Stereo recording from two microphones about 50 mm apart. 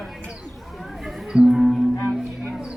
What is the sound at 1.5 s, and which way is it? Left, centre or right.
Music, centre.